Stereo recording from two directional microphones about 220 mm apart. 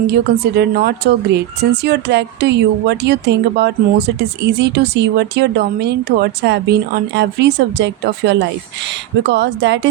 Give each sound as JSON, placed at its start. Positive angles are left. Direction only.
{"t": 0.1, "sound": "speech", "side_deg": -45}